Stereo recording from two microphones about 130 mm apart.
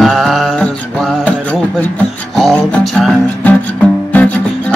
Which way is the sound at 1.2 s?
10° left (ahead or behind).